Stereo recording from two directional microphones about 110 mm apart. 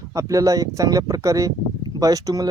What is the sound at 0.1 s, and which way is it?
Speech, 30° right (ahead or behind).